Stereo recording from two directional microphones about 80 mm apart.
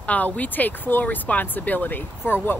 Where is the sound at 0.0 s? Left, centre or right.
Centre.